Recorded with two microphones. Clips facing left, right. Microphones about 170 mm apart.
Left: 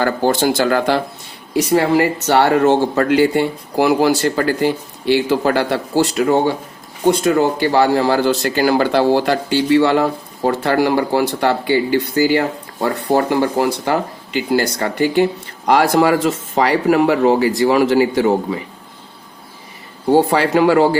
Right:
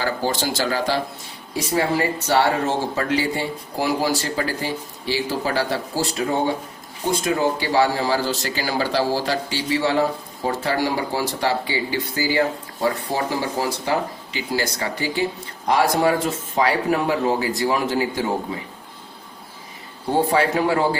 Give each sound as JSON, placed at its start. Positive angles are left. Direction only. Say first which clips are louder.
{"t": 0.0, "sound": "speech", "louder": "left 8 dB", "side_deg": 55}
{"t": 1.5, "sound": "speech", "louder": "left 7 dB", "side_deg": 75}
{"t": 7.0, "sound": "speech", "louder": "left 7 dB", "side_deg": 65}
{"t": 20.1, "sound": "speech", "louder": "left 5 dB", "side_deg": 85}